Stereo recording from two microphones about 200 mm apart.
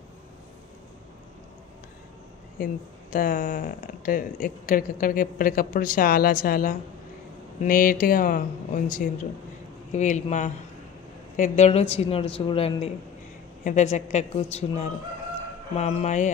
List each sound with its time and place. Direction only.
2.6 s a woman's voice: 45° left (ahead or behind)